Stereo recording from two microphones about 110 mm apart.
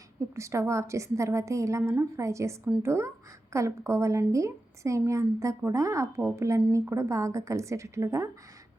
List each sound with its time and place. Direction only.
0.3 s a woman's voice: 25° right (ahead or behind)